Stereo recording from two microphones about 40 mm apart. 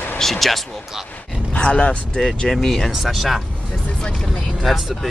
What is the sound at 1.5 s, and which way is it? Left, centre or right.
Speech, left.